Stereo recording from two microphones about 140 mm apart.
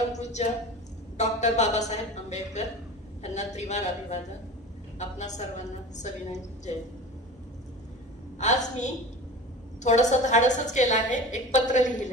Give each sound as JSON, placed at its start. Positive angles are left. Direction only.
{"t": 1.1, "sound": "a woman's voice", "side_deg": 55}
{"t": 8.4, "sound": "a woman's voice", "side_deg": 55}